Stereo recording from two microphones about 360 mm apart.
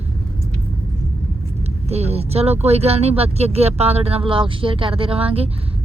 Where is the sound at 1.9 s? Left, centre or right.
Centre.